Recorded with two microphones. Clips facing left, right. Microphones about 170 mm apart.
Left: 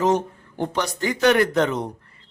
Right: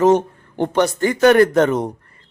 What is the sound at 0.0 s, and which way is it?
Speech, 55° right (ahead or behind).